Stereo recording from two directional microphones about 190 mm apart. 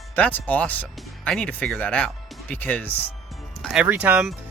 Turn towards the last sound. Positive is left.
turn(degrees=-5)  # may be behind; listen again after turning